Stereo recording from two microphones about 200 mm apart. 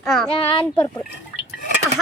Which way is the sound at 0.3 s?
25° left (ahead or behind).